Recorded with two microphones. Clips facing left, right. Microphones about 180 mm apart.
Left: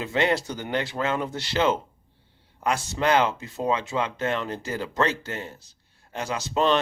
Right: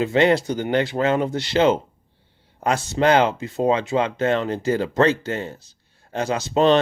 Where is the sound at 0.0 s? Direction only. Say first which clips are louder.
Right 7 dB; 25° right (ahead or behind).